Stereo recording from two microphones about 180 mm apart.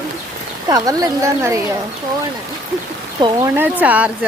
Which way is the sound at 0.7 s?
20° right (ahead or behind).